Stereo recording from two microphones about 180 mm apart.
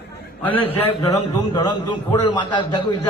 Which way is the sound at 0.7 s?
20° left (ahead or behind).